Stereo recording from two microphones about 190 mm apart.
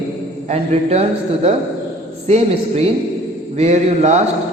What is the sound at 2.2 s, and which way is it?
A man's voice, 35° right (ahead or behind).